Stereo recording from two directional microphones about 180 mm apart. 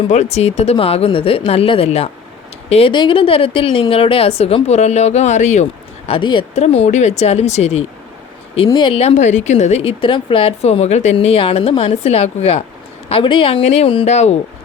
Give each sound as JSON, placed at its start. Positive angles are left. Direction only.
{"t": 0.1, "sound": "speech", "side_deg": 40}
{"t": 6.1, "sound": "speech", "side_deg": 25}